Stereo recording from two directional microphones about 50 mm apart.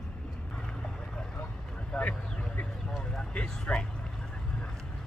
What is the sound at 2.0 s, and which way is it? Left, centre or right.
Vehicle, left.